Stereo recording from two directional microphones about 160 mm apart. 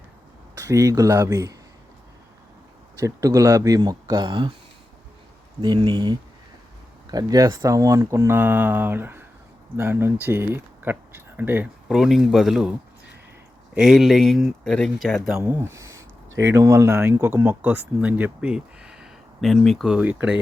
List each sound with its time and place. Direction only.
0.5 s speech: 20° right (ahead or behind)
2.9 s speech: 20° right (ahead or behind)
5.6 s speech: 30° right (ahead or behind); by 12.7 s centre (ahead or behind)
13.7 s speech: 5° right (ahead or behind)
15.4 s speech: 15° right (ahead or behind)